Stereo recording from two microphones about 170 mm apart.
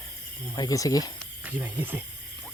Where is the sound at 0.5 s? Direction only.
20° left (ahead or behind).